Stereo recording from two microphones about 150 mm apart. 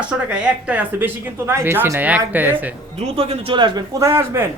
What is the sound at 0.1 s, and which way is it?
Speech, 5° right (ahead or behind).